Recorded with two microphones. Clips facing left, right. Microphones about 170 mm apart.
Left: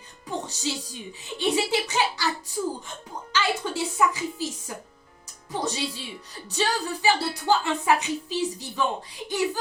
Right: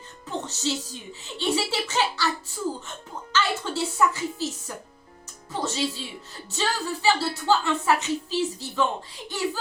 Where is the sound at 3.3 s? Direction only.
15° left (ahead or behind).